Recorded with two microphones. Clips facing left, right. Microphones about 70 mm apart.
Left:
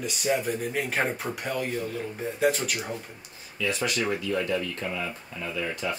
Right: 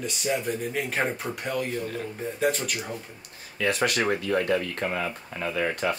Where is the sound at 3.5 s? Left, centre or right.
Right.